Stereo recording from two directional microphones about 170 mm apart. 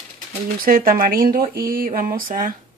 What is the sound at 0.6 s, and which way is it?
Speech, 55° right (ahead or behind).